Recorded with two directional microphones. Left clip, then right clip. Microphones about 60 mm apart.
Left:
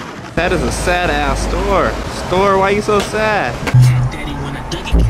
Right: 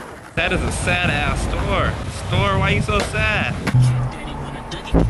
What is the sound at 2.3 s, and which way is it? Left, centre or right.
Speech, left.